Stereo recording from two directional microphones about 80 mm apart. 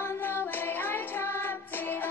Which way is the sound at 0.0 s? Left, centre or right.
Left.